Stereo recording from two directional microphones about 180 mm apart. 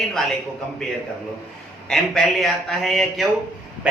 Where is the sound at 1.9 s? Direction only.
Centre (ahead or behind).